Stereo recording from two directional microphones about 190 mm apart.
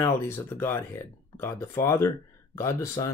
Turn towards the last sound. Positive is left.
turn(degrees=15)  # may be behind; listen again after turning